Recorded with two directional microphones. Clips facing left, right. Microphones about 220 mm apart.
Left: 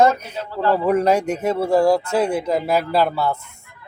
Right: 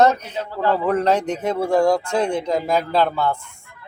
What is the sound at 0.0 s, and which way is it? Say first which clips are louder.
Speech: even; 10° left (ahead or behind).